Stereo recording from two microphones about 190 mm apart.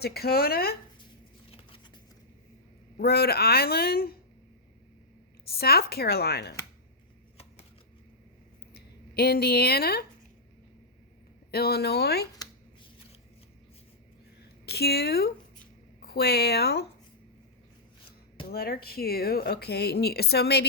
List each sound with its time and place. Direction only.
0.0 s a woman's voice: 55° left (ahead or behind)
1.5 s a sound: 30° left (ahead or behind)
3.0 s a woman's voice: 55° left (ahead or behind)
5.5 s a woman's voice: 55° left (ahead or behind)
8.7 s speech: 55° left (ahead or behind)
11.5 s a woman's voice: 55° left (ahead or behind)
14.7 s a woman's voice: 55° left (ahead or behind)
18.5 s a woman's voice: 55° left (ahead or behind)